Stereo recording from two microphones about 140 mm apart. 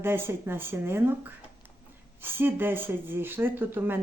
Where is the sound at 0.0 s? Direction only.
15° right (ahead or behind).